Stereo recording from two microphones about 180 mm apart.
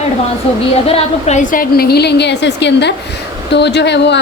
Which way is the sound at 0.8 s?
35° left (ahead or behind).